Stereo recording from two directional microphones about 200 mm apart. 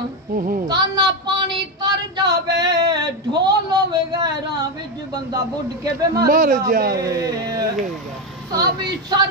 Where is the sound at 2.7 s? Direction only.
20° right (ahead or behind).